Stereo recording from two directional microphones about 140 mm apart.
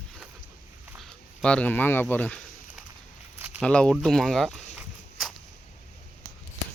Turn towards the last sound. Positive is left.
turn(degrees=0)  # may be behind; listen again after turning